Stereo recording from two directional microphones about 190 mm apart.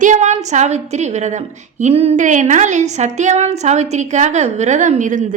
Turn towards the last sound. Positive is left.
turn(degrees=-40)  # may be behind; listen again after turning